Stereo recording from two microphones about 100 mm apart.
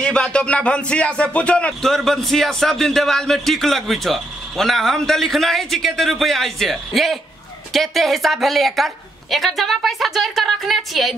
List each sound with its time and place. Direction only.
0.0 s speech: 10° left (ahead or behind)